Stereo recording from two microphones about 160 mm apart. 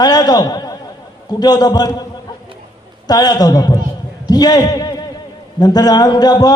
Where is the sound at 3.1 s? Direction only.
25° left (ahead or behind).